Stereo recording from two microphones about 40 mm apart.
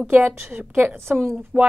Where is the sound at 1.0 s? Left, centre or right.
Right.